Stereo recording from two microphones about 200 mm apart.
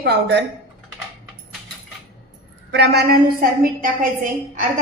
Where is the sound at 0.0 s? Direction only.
55° right (ahead or behind).